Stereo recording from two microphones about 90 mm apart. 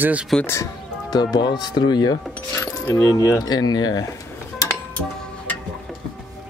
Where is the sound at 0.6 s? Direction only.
50° left (ahead or behind).